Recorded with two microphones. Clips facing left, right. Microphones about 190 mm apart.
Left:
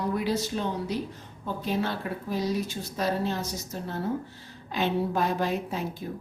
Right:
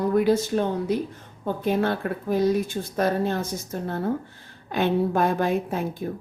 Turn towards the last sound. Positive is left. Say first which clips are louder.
# right 5 dB
turn(degrees=-55)  # may be behind; listen again after turning